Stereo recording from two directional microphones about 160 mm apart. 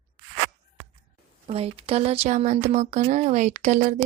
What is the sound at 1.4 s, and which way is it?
Speech, 40° right (ahead or behind).